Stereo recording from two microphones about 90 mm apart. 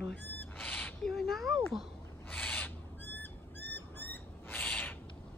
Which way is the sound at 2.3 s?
20° left (ahead or behind).